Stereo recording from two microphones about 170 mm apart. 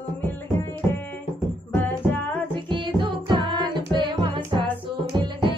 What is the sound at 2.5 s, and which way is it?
Music, 30° right (ahead or behind).